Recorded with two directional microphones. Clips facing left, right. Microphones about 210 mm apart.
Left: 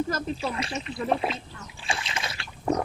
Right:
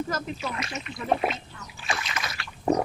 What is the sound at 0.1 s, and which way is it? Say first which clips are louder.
Speech: left 2 dB; 30° left (ahead or behind).